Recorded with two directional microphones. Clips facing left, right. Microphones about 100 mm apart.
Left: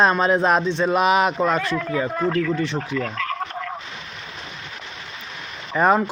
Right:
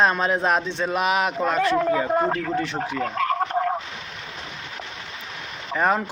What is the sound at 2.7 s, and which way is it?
Fowl, 30° right (ahead or behind).